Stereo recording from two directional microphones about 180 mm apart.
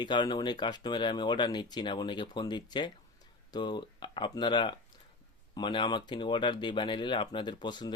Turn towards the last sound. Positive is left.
turn(degrees=25)  # may be behind; listen again after turning